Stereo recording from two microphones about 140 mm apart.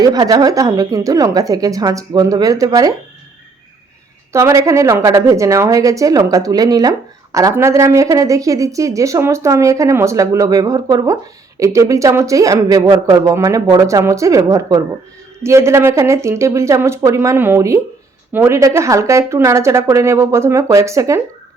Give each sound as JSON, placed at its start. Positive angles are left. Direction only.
{"t": 0.0, "sound": "a woman's voice", "side_deg": -25}
{"t": 4.3, "sound": "a woman's voice", "side_deg": -20}